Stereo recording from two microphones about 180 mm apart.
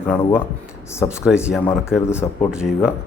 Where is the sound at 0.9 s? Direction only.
15° left (ahead or behind).